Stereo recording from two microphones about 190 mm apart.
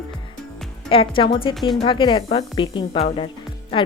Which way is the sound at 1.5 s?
Centre (ahead or behind).